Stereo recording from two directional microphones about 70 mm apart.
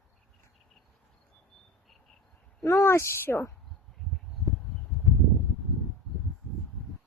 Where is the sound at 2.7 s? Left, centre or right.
Left.